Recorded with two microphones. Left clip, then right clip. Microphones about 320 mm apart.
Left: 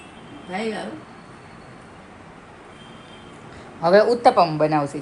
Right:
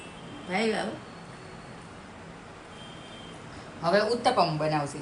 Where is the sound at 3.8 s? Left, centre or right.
Centre.